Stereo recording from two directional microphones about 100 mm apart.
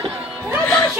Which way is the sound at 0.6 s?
15° left (ahead or behind).